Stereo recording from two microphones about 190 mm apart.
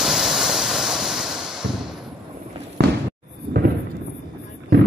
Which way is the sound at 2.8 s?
60° right (ahead or behind).